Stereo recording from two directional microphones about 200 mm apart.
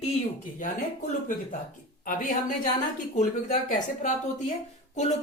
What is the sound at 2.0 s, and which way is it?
Speech, 40° left (ahead or behind).